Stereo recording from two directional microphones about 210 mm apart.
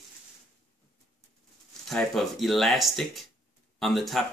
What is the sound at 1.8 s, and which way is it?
Speech, centre (ahead or behind).